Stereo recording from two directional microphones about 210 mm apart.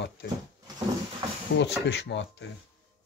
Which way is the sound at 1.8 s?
60° left (ahead or behind).